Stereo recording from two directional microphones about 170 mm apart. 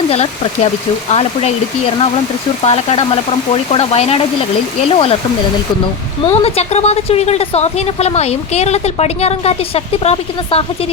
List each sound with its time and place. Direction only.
0.1 s speech: 35° left (ahead or behind)
2.6 s speech: 35° left (ahead or behind)
6.4 s speech: 40° left (ahead or behind)